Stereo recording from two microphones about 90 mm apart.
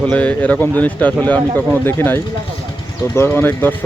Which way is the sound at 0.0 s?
15° left (ahead or behind).